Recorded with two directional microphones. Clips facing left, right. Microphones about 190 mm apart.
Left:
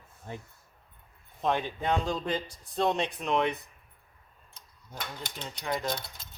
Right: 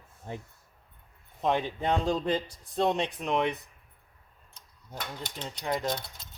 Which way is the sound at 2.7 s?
20° right (ahead or behind).